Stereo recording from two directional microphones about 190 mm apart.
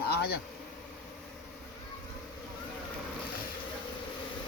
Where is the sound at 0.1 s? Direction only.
55° left (ahead or behind).